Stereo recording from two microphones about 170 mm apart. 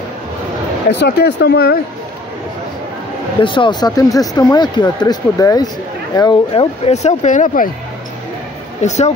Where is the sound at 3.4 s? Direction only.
30° left (ahead or behind).